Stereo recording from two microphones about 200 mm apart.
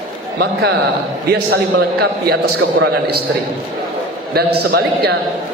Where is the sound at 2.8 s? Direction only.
50° right (ahead or behind).